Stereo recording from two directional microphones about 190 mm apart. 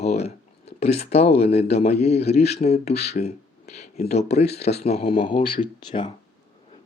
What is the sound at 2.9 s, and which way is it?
Speech, 60° left (ahead or behind).